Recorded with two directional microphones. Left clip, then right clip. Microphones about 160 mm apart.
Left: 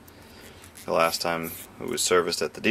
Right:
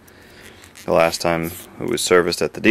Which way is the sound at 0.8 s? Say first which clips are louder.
Right 7 dB; 15° right (ahead or behind).